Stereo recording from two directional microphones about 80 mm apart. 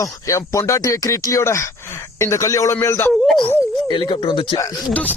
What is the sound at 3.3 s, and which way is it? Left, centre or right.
Speech, left.